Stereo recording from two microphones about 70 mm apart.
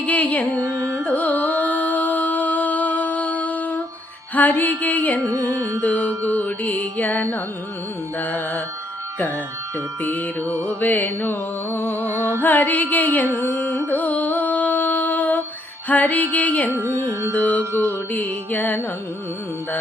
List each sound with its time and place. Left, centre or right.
0.0 s music: left
0.6 s carnatic music: right
1.0 s carnatic music: left
2.0 s music: left
5.2 s music: right
5.8 s music: left
10.0 s music: left
16.7 s carnatic music: right
17.3 s music: left